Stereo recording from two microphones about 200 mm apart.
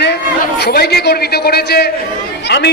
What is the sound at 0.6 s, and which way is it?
A man's voice, 55° left (ahead or behind).